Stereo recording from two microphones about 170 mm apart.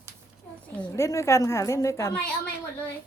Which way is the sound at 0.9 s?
20° left (ahead or behind).